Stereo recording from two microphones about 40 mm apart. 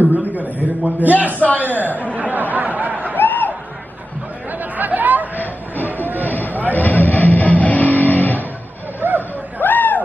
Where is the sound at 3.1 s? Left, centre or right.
Left.